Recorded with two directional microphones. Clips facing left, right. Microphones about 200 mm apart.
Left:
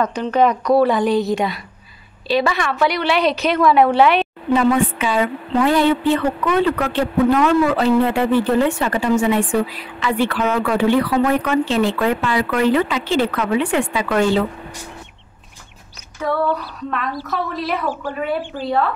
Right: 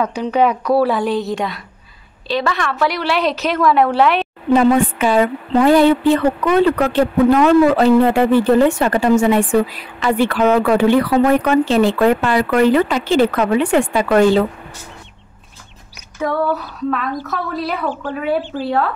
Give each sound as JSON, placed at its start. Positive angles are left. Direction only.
{"t": 0.0, "sound": "a woman's voice", "side_deg": -10}
{"t": 4.5, "sound": "a woman's voice", "side_deg": -45}
{"t": 16.2, "sound": "female singing", "side_deg": -5}
{"t": 17.6, "sound": "speech", "side_deg": 10}